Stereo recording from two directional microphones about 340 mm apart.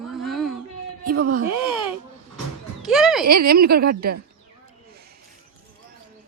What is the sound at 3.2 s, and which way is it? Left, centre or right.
Speech, right.